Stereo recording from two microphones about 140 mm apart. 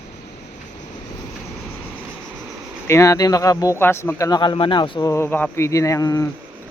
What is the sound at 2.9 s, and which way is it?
Speech, 20° left (ahead or behind).